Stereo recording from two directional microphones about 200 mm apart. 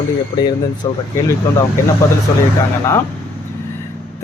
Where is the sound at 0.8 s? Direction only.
20° left (ahead or behind).